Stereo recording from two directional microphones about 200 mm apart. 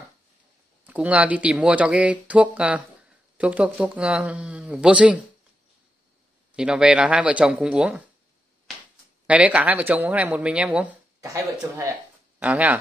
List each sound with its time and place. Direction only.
0.8 s speech: 5° right (ahead or behind)
6.5 s speech: 5° right (ahead or behind)
9.3 s speech: 5° right (ahead or behind)